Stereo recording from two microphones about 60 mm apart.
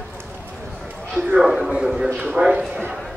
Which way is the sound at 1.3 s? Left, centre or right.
Centre.